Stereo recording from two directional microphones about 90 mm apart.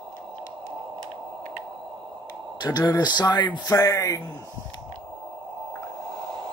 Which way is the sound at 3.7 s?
40° left (ahead or behind).